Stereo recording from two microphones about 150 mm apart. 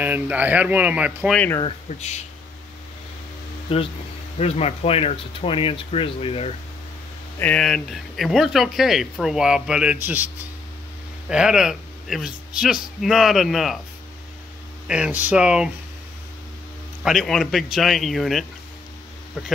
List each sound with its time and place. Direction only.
0.0 s speech: 10° right (ahead or behind)
1.3 s speech: 10° left (ahead or behind)
1.9 s speech: 50° left (ahead or behind)
3.7 s speech: 40° left (ahead or behind)
7.3 s a man's voice: 10° left (ahead or behind)
14.9 s speech: 10° right (ahead or behind)
17.0 s speech: centre (ahead or behind)